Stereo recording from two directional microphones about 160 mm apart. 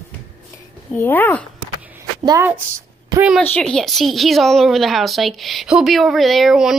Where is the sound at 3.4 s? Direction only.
5° left (ahead or behind).